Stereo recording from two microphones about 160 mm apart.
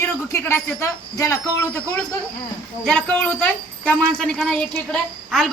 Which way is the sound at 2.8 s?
5° left (ahead or behind).